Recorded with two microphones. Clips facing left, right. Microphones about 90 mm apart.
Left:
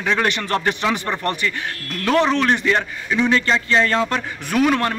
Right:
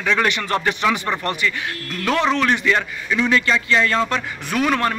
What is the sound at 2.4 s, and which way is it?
Speech, 35° left (ahead or behind).